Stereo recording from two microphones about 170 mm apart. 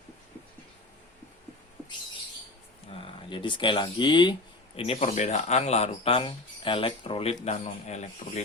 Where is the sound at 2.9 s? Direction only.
30° left (ahead or behind).